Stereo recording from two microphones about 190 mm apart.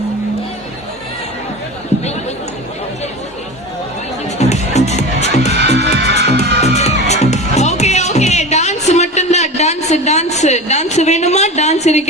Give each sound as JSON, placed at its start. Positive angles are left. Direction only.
{"t": 1.9, "sound": "chatter", "side_deg": 35}
{"t": 4.4, "sound": "music", "side_deg": 35}
{"t": 5.7, "sound": "music", "side_deg": -60}
{"t": 6.2, "sound": "music", "side_deg": 35}